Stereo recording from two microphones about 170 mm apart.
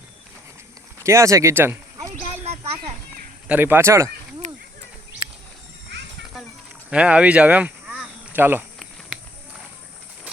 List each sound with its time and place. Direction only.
1.0 s speech: 15° right (ahead or behind)
2.4 s a sound: 40° right (ahead or behind)
3.4 s speech: 10° right (ahead or behind)
4.4 s a sound: 45° right (ahead or behind)
5.9 s music: 90° right
6.9 s speech: 5° right (ahead or behind)